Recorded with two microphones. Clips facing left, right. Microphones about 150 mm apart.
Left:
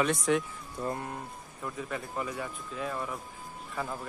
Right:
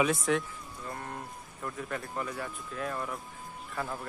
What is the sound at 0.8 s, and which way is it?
Speech, 40° left (ahead or behind).